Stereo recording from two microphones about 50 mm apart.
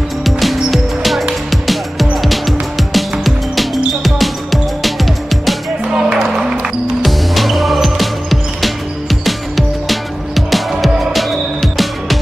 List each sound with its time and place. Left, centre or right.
0.2 s music: centre
5.9 s music: centre
7.0 s music: centre